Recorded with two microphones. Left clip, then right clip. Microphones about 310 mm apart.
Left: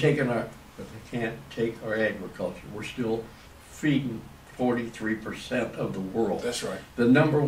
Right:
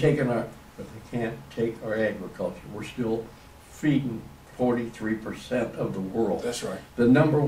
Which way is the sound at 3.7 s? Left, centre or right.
Centre.